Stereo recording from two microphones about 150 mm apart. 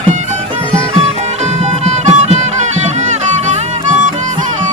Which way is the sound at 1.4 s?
50° right (ahead or behind).